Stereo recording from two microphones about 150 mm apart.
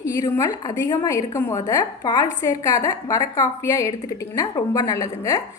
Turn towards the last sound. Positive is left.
turn(degrees=20)  # may be behind; listen again after turning